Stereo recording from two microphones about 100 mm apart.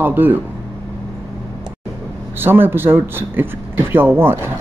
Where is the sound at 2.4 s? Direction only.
20° right (ahead or behind).